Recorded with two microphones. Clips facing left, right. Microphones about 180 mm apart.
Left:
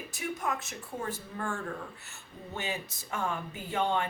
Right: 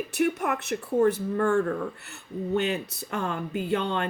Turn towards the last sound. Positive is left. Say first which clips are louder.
# right 4 dB
turn(degrees=-65)  # may be behind; listen again after turning